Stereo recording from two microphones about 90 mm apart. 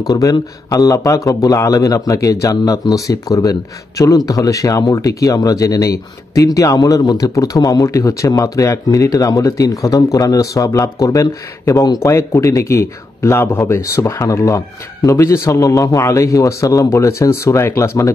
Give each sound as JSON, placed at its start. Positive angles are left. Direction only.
{"t": 0.0, "sound": "a man's voice", "side_deg": 45}
{"t": 12.0, "sound": "a man's voice", "side_deg": 30}